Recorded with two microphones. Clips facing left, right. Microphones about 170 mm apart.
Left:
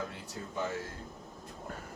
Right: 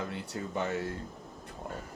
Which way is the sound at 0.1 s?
70° right (ahead or behind).